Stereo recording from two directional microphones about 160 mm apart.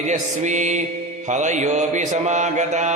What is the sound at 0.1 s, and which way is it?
Music, 50° right (ahead or behind).